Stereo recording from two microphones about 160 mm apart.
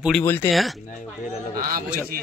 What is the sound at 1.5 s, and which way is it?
Speech, 65° right (ahead or behind).